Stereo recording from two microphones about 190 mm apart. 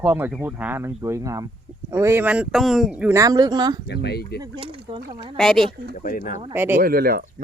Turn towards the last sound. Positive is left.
turn(degrees=-50)  # may be behind; listen again after turning